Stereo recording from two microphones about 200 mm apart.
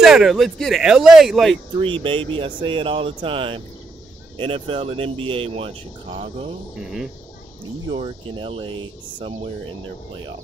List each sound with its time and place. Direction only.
0.0 s speech: centre (ahead or behind)
1.8 s speech: 25° right (ahead or behind)
6.8 s speech: centre (ahead or behind)
7.9 s speech: 25° right (ahead or behind)